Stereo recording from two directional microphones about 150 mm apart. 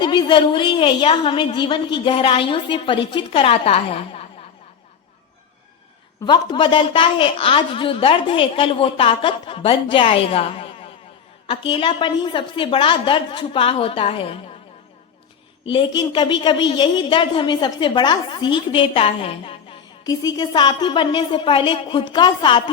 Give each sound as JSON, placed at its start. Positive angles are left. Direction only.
{"t": 0.0, "sound": "a woman's voice", "side_deg": 30}
{"t": 6.2, "sound": "a woman's voice", "side_deg": 30}
{"t": 15.7, "sound": "a woman's voice", "side_deg": 30}
{"t": 20.1, "sound": "a woman's voice", "side_deg": 25}